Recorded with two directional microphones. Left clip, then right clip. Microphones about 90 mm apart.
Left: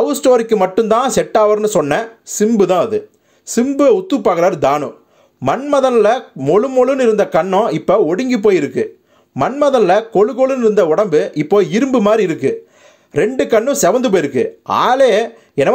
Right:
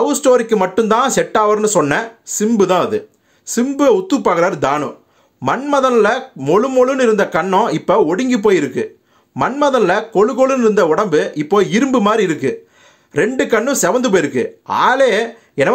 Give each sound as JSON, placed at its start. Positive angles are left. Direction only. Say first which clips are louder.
{"t": 0.0, "sound": "speech", "louder": "even", "side_deg": 30}